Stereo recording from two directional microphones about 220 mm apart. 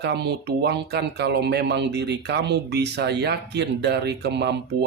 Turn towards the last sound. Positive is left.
turn(degrees=-50)  # may be behind; listen again after turning